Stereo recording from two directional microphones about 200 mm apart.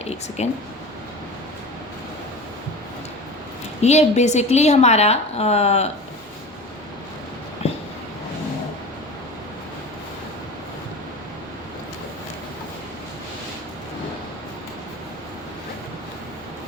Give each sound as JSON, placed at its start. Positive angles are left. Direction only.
{"t": 0.0, "sound": "speech", "side_deg": 30}
{"t": 3.8, "sound": "speech", "side_deg": 35}